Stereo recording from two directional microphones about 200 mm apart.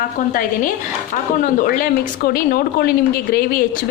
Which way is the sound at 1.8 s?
45° left (ahead or behind).